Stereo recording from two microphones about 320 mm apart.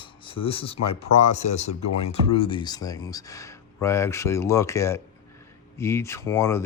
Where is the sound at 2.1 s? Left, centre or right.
Centre.